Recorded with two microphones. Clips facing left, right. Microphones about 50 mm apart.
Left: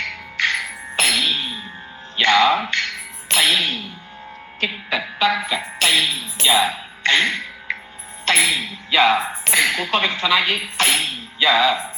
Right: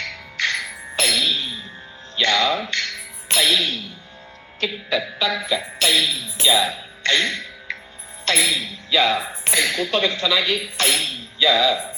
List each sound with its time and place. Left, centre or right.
0.0 s music: left
2.1 s speech: left
6.4 s music: left
8.2 s a sound: left
9.5 s speech: left